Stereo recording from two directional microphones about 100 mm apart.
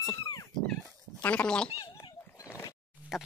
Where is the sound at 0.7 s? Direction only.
15° left (ahead or behind).